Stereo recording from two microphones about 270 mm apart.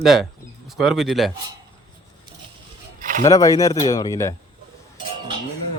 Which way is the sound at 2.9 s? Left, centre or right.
Right.